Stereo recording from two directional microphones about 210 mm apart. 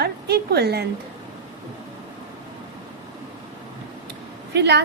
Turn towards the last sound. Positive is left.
turn(degrees=-55)  # may be behind; listen again after turning